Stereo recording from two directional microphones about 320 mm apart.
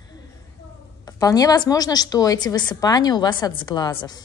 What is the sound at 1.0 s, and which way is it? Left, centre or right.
A woman's voice, centre.